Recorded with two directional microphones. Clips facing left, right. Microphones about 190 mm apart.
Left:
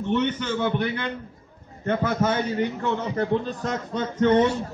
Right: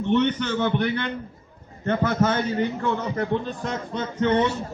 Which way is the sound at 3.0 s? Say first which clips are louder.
Left 1 dB; 35° left (ahead or behind).